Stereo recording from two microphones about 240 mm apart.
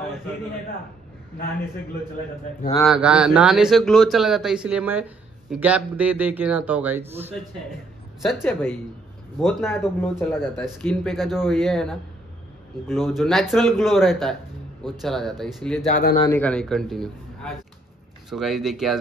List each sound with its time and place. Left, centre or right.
2.8 s speech: centre
8.4 s speech: centre
15.9 s speech: left
16.2 s speech: centre